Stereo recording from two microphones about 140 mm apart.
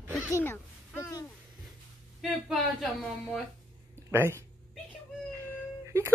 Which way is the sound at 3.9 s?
20° right (ahead or behind).